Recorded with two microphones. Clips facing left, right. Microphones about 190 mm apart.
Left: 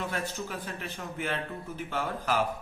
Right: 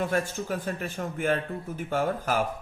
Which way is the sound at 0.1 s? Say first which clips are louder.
Right 6 dB; 45° right (ahead or behind).